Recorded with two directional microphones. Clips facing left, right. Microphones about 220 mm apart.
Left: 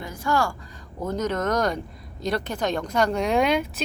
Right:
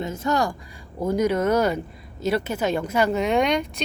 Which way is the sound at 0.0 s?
25° right (ahead or behind).